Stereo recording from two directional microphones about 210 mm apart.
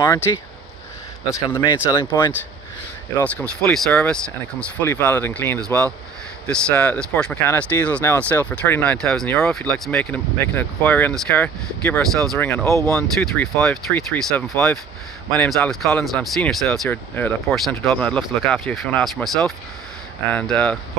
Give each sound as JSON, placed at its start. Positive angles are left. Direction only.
{"t": 0.3, "sound": "speech", "side_deg": 15}
{"t": 3.2, "sound": "speech", "side_deg": 5}